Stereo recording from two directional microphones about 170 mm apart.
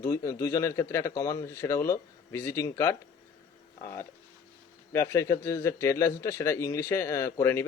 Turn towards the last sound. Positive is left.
turn(degrees=15)  # may be behind; listen again after turning